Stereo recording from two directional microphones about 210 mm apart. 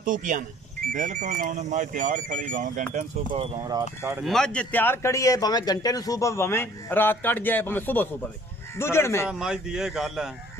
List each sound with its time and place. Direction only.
0.0 s speech: 40° right (ahead or behind)
3.6 s speech: 15° right (ahead or behind)
4.3 s a man's voice: 5° left (ahead or behind)
9.3 s speech: 5° right (ahead or behind)